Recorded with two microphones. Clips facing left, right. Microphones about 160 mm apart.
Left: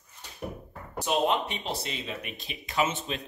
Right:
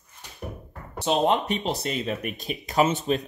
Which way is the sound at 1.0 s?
40° right (ahead or behind).